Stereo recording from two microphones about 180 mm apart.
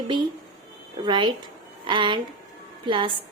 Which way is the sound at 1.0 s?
25° right (ahead or behind).